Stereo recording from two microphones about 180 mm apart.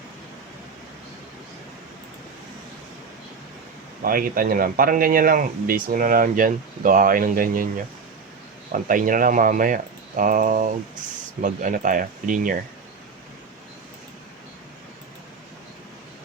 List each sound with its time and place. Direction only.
4.0 s speech: 50° right (ahead or behind)